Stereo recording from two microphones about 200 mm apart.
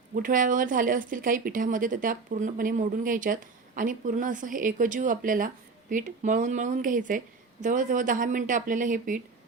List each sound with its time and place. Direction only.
0.1 s speech: 40° right (ahead or behind)